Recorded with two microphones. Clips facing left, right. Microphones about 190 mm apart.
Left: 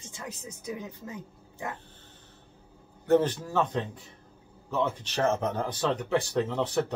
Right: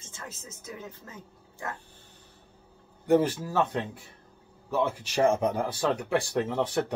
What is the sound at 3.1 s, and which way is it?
Speech, 10° right (ahead or behind).